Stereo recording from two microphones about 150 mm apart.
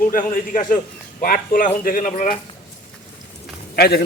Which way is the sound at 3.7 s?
90° left.